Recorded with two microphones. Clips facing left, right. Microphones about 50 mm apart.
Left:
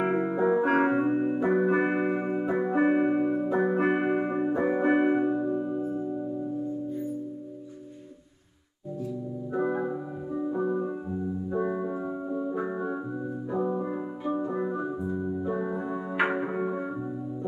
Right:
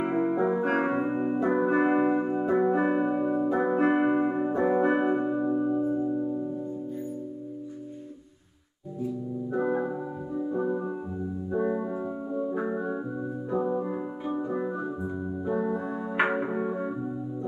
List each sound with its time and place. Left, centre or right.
0.2 s music: centre
9.5 s organ: centre
10.6 s music: centre
11.5 s organ: centre
13.6 s music: centre
14.6 s organ: centre
16.2 s music: centre